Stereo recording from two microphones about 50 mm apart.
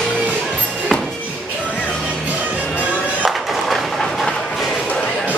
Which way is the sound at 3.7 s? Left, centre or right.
Centre.